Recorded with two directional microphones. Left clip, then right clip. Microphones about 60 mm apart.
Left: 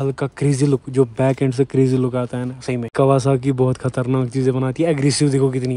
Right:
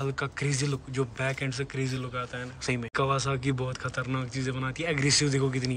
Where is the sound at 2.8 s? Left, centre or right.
Centre; by 4.3 s left.